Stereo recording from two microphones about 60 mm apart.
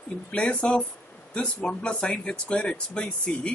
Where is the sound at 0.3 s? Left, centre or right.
Left.